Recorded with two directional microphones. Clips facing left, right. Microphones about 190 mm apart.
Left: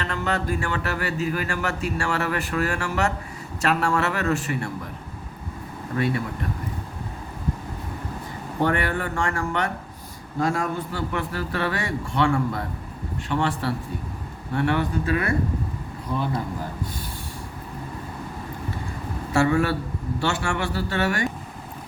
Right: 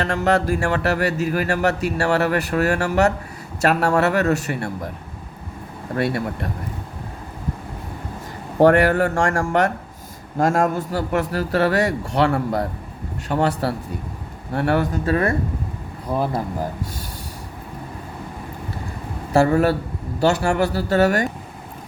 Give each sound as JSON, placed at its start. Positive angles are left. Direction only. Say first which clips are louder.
{"t": 0.0, "sound": "speech", "louder": "right 7 dB", "side_deg": -45}
{"t": 6.0, "sound": "speech", "louder": "right 3 dB", "side_deg": -40}
{"t": 8.6, "sound": "speech", "louder": "right 10 dB", "side_deg": -40}
{"t": 19.3, "sound": "speech", "louder": "right 5 dB", "side_deg": -40}